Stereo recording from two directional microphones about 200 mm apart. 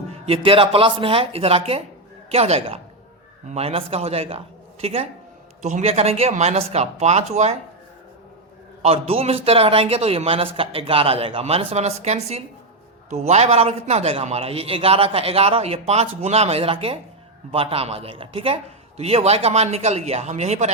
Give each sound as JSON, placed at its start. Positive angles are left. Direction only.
{"t": 0.1, "sound": "a man's voice", "side_deg": -30}
{"t": 8.8, "sound": "a man's voice", "side_deg": -30}